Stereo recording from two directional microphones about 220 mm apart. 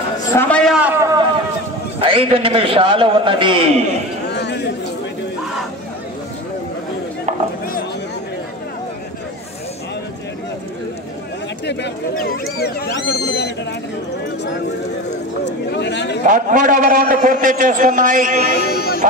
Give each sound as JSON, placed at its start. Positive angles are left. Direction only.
{"t": 0.3, "sound": "a sound", "side_deg": 10}
{"t": 2.0, "sound": "a man's voice", "side_deg": -25}
{"t": 4.3, "sound": "chatter", "side_deg": 50}
{"t": 11.6, "sound": "speech", "side_deg": 50}
{"t": 15.4, "sound": "speech", "side_deg": 50}
{"t": 16.3, "sound": "a man's voice", "side_deg": -35}
{"t": 18.5, "sound": "speech", "side_deg": 45}